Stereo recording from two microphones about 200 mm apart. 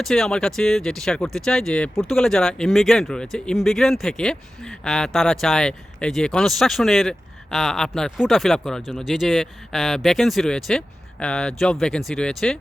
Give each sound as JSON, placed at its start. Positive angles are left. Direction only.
{"t": 0.0, "sound": "speech", "side_deg": 0}